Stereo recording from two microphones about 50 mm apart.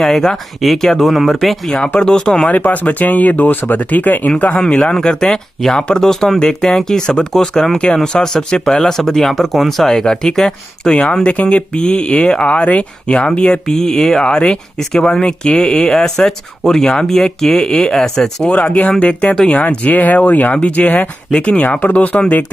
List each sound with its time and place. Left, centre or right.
0.0 s speech: centre
1.0 s speech: centre
2.5 s speech: left
4.7 s speech: centre
13.7 s speech: centre
18.5 s speech: left
21.3 s speech: left
21.6 s speech: left